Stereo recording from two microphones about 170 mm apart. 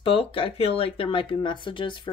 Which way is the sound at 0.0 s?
35° left (ahead or behind).